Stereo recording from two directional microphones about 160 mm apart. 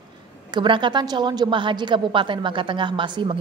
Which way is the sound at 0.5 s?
30° right (ahead or behind).